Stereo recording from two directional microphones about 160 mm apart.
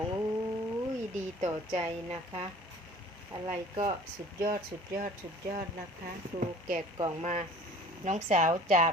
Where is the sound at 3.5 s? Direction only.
30° right (ahead or behind).